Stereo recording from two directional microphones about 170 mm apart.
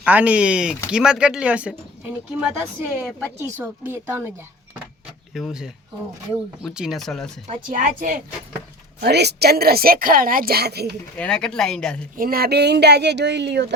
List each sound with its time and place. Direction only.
0.0 s speech: 10° right (ahead or behind)
5.3 s speech: centre (ahead or behind)
7.4 s speech: 50° right (ahead or behind)
9.0 s a woman's voice: 75° right (ahead or behind)
11.2 s speech: 5° left (ahead or behind)
12.1 s speech: 60° right (ahead or behind); by 13.7 s 90° right